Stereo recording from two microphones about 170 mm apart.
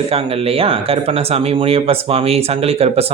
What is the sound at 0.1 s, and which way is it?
Speech, 35° right (ahead or behind).